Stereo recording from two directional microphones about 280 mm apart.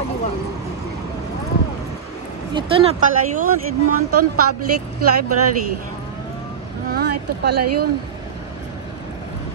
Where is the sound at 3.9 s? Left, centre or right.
Right.